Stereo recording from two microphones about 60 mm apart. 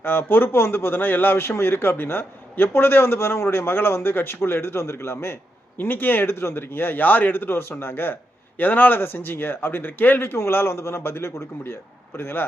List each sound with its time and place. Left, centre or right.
0.0 s a man's voice: left